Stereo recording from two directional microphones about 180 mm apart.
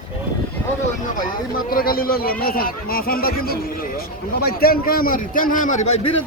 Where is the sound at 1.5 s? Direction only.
55° left (ahead or behind).